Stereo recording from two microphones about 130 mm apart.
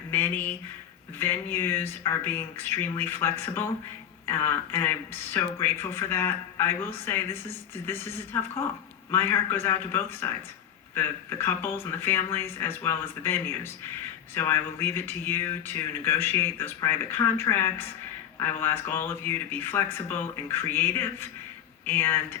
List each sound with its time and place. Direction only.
0.1 s speech: 15° left (ahead or behind)